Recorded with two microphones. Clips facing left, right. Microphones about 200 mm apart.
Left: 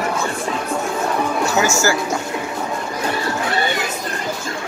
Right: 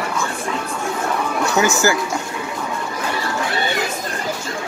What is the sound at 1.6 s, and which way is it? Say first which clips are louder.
Speech: right 2 dB; 20° right (ahead or behind).